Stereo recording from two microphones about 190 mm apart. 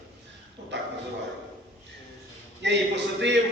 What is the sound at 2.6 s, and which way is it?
Speech, 65° right (ahead or behind).